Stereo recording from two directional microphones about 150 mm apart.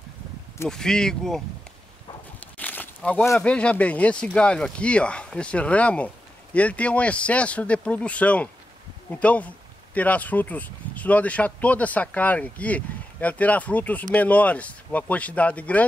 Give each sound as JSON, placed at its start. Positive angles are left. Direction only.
{"t": 0.7, "sound": "speech", "side_deg": 5}
{"t": 2.4, "sound": "a sound", "side_deg": 10}
{"t": 3.3, "sound": "speech", "side_deg": 10}